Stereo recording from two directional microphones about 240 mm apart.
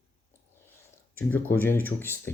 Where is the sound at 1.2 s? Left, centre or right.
Centre.